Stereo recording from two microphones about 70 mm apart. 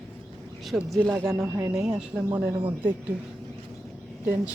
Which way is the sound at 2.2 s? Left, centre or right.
Right.